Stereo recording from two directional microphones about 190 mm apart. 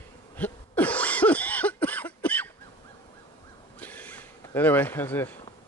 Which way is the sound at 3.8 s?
10° left (ahead or behind).